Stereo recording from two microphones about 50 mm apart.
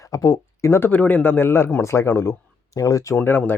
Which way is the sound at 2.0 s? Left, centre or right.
Left.